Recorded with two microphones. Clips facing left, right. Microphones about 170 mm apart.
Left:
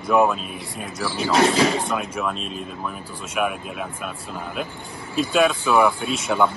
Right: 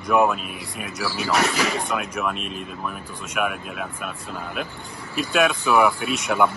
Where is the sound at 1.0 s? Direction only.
25° left (ahead or behind).